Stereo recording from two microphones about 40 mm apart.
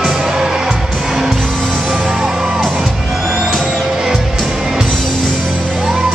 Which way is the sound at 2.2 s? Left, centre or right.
Centre.